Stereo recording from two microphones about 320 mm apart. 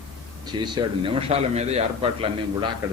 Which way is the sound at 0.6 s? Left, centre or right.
Centre.